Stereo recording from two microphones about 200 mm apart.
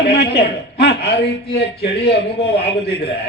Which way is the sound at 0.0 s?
55° left (ahead or behind).